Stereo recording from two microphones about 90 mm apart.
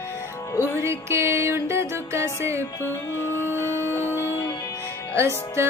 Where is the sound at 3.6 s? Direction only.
30° right (ahead or behind).